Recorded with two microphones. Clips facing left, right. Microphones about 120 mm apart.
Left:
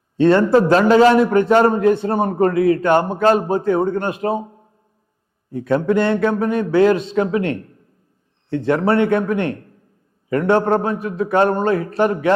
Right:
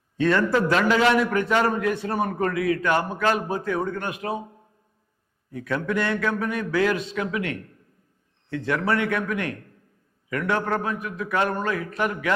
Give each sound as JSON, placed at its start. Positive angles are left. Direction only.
{"t": 0.2, "sound": "a man's voice", "side_deg": 30}